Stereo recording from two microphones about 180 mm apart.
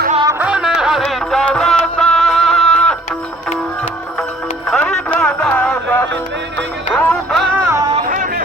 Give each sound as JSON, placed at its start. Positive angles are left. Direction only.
{"t": 0.3, "sound": "music", "side_deg": -5}
{"t": 4.7, "sound": "a sound", "side_deg": 5}
{"t": 6.6, "sound": "music", "side_deg": 10}
{"t": 7.5, "sound": "music", "side_deg": -15}
{"t": 8.0, "sound": "music", "side_deg": -45}